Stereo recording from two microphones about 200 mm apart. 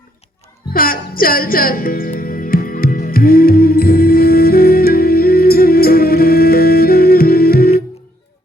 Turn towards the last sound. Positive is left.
turn(degrees=50)  # may be behind; listen again after turning